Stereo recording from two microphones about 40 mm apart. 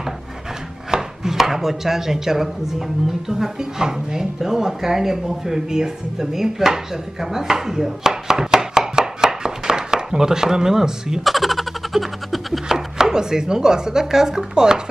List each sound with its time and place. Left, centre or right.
0.9 s chopping: centre
3.3 s speech: centre
11.2 s baby laughter: centre
12.6 s speech: centre